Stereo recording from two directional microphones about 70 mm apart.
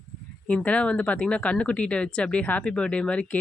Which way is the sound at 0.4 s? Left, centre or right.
Centre.